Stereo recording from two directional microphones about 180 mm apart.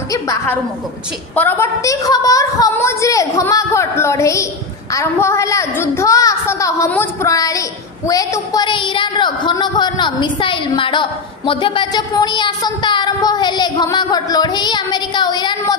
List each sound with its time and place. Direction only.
0.1 s a woman's voice: 20° left (ahead or behind)